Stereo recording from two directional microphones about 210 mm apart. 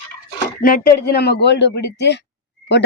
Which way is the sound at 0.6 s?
40° left (ahead or behind).